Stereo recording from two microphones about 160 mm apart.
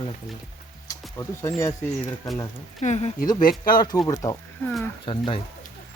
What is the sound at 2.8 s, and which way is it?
Speech, 45° left (ahead or behind).